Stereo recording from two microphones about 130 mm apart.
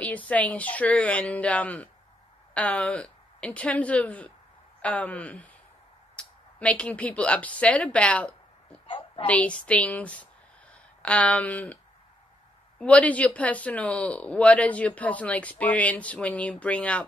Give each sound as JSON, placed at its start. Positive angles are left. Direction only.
{"t": 0.3, "sound": "speech", "side_deg": 10}
{"t": 8.8, "sound": "a sound", "side_deg": 40}
{"t": 9.2, "sound": "speech", "side_deg": 10}